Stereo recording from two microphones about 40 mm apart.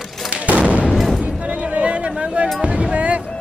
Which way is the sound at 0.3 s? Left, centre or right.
Right.